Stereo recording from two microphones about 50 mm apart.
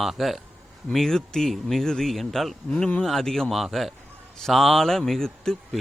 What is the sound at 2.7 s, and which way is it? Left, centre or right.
Speech, left.